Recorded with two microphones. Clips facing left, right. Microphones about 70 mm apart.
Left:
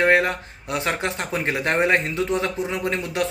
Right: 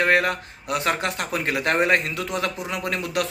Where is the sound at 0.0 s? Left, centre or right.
Left.